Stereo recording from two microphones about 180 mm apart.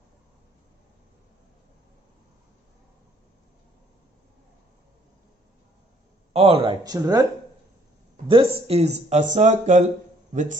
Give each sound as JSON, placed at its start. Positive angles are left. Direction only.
{"t": 6.3, "sound": "speech", "side_deg": -30}
{"t": 8.3, "sound": "speech", "side_deg": -30}